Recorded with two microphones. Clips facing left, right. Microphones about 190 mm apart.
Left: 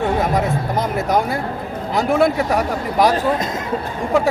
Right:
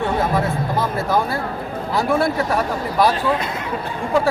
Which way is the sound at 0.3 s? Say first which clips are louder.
Left 1 dB; 20° left (ahead or behind).